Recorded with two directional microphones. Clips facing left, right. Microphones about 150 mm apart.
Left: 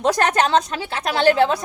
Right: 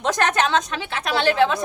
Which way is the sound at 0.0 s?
35° left (ahead or behind).